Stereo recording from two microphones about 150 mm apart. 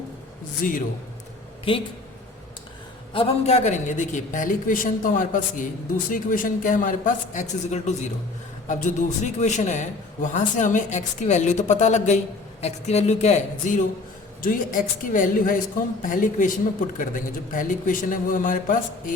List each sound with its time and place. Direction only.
0.6 s a woman's voice: 65° left (ahead or behind)
1.7 s speech: 40° left (ahead or behind)
3.1 s a woman's voice: 40° left (ahead or behind)
14.4 s a woman's voice: 65° left (ahead or behind)